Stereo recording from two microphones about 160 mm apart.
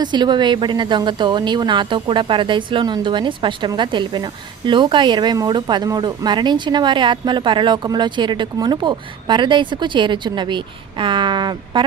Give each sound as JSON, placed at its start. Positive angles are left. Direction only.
{"t": 0.0, "sound": "a woman's voice", "side_deg": -30}